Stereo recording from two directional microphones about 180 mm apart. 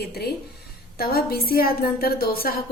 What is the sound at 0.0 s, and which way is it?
A woman's voice, 65° left (ahead or behind).